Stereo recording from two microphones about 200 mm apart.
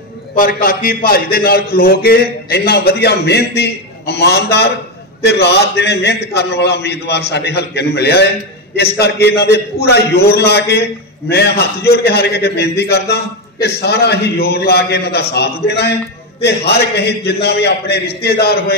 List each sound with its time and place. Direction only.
0.4 s a man's voice: 45° left (ahead or behind)